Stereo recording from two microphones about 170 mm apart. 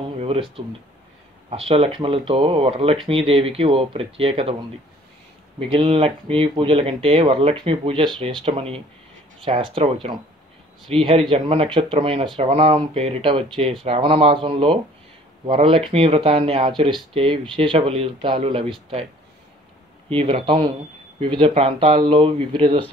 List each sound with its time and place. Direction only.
0.2 s speech: 35° right (ahead or behind)
5.6 s speech: 30° right (ahead or behind)
20.1 s speech: 35° right (ahead or behind)